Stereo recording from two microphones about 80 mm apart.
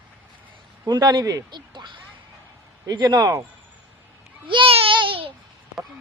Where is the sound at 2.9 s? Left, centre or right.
Right.